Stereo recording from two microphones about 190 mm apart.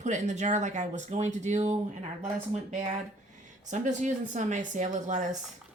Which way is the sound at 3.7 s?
40° right (ahead or behind).